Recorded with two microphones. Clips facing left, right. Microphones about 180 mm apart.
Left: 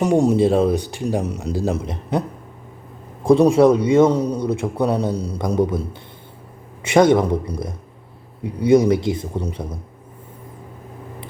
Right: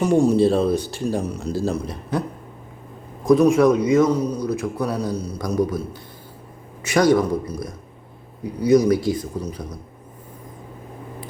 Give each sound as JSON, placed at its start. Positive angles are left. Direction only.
{"t": 0.0, "sound": "speech", "side_deg": 20}
{"t": 3.2, "sound": "speech", "side_deg": 30}